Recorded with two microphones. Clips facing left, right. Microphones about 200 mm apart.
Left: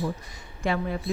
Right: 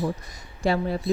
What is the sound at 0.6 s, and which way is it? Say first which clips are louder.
Speech: right 3 dB; 35° right (ahead or behind).